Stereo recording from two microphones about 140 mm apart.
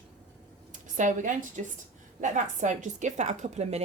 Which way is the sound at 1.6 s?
60° right (ahead or behind).